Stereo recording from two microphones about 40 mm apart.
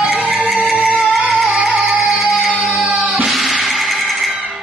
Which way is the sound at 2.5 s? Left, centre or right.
Right.